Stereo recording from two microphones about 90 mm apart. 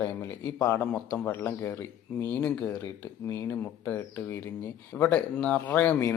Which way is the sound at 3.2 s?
30° left (ahead or behind).